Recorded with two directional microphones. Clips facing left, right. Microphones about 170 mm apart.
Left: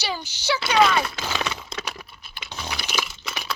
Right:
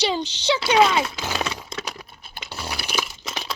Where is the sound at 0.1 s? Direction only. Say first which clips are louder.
Right 4 dB; 25° right (ahead or behind).